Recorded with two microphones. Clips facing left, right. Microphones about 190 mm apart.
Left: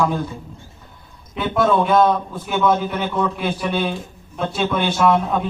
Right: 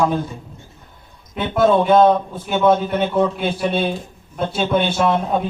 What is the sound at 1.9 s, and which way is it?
A man's voice, 25° right (ahead or behind).